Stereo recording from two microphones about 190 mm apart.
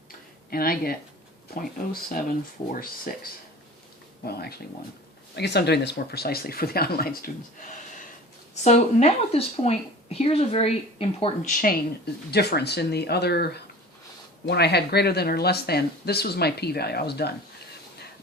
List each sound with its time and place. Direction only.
0.5 s speech: 50° left (ahead or behind)
4.3 s speech: 55° left (ahead or behind)
8.6 s a woman's voice: 35° left (ahead or behind)
12.3 s speech: 60° left (ahead or behind)